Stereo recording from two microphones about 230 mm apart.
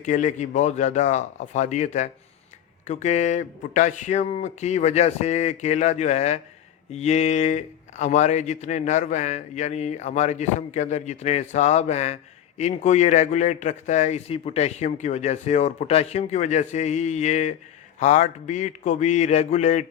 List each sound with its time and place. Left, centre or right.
0.0 s speech: left